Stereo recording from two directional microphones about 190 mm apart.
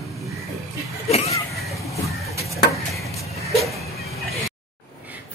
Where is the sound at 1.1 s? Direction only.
35° left (ahead or behind).